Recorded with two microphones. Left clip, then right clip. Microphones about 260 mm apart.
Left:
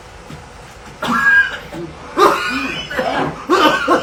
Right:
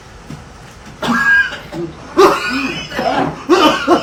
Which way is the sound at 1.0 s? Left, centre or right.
Right.